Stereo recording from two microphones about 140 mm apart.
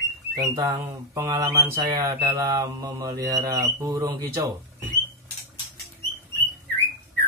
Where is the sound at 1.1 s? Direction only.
20° right (ahead or behind).